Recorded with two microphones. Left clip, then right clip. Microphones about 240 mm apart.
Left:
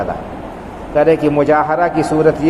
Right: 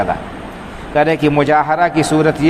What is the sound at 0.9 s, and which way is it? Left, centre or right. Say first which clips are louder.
A man's voice: left 1 dB; right.